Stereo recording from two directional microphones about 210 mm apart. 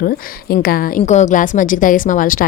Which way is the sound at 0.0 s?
45° left (ahead or behind).